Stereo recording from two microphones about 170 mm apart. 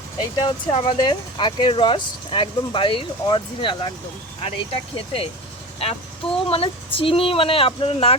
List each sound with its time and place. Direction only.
0.2 s speech: 25° left (ahead or behind)
4.9 s speech: 35° left (ahead or behind)